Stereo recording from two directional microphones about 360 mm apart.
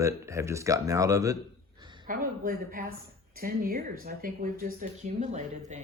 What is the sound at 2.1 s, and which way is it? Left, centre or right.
Speech, right.